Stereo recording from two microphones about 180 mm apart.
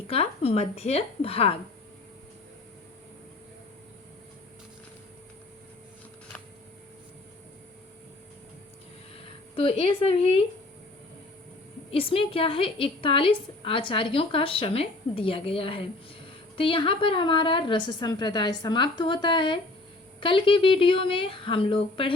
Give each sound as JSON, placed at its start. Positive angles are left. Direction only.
{"t": 0.1, "sound": "a woman's voice", "side_deg": 35}
{"t": 9.6, "sound": "a woman's voice", "side_deg": 30}
{"t": 11.9, "sound": "a woman's voice", "side_deg": 30}